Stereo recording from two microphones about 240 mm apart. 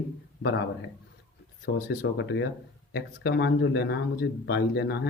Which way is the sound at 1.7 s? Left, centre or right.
Left.